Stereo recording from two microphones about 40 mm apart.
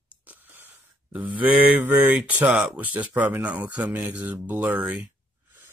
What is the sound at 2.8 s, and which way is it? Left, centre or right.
Speech, right.